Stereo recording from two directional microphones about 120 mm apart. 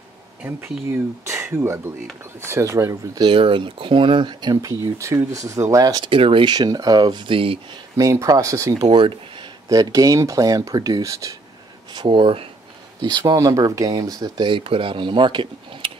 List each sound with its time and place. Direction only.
0.4 s speech: 20° right (ahead or behind)
3.3 s speech: 45° right (ahead or behind); by 5.9 s 25° right (ahead or behind)
5.9 s speech: 45° right (ahead or behind)
8.0 s speech: 25° right (ahead or behind)
9.7 s speech: 30° right (ahead or behind)
11.9 s speech: 40° right (ahead or behind)
13.0 s speech: 35° right (ahead or behind)